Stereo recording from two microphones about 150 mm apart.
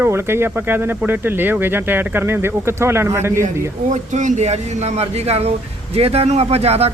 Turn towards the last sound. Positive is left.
turn(degrees=-45)  # may be behind; listen again after turning